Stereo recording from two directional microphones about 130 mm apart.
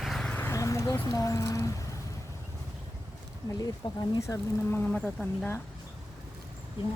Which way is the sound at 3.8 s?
35° left (ahead or behind).